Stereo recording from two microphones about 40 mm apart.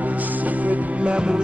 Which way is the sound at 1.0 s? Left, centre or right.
Right.